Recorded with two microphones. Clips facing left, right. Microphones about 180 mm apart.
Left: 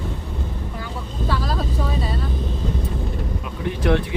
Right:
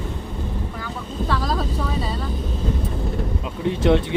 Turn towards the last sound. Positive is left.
turn(degrees=-25)  # may be behind; listen again after turning